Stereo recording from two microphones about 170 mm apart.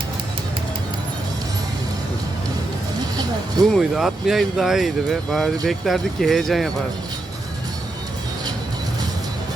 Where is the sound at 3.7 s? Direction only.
Centre (ahead or behind).